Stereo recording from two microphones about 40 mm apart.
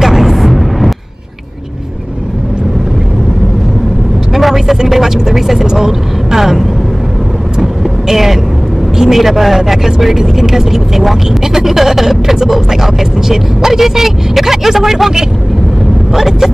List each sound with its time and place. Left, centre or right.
0.0 s a sound: centre
4.4 s vehicle: centre
5.7 s speech: centre
8.1 s speech: centre